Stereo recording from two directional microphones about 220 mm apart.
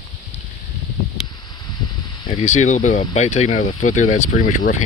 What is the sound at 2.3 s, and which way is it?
Speech, 35° left (ahead or behind).